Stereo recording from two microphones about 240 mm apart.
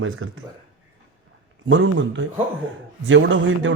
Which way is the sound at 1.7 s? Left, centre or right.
Right.